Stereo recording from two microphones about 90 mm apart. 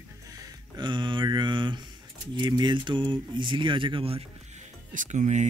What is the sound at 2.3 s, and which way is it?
Speech, 60° right (ahead or behind).